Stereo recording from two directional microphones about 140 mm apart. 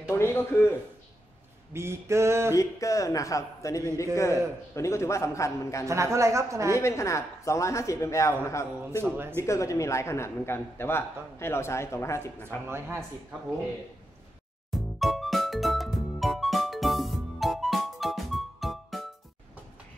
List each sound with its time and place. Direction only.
0.1 s a man's voice: 20° left (ahead or behind)
1.7 s speech: 20° right (ahead or behind)
2.5 s a man's voice: 25° left (ahead or behind)
5.9 s speech: 20° right (ahead or behind)
6.8 s a man's voice: 20° left (ahead or behind)
9.0 s speech: 15° right (ahead or behind)
9.4 s a man's voice: 20° left (ahead or behind)
12.6 s speech: 15° right (ahead or behind)
14.7 s music: centre (ahead or behind)